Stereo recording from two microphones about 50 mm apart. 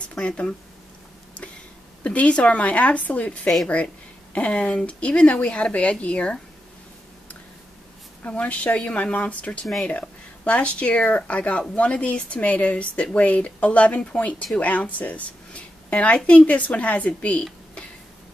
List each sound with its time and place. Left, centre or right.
0.1 s speech: left
2.0 s speech: left
8.3 s speech: left